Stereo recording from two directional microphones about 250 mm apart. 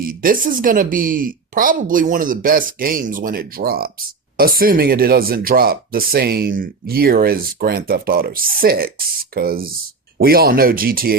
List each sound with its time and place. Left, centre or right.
0.0 s speech: right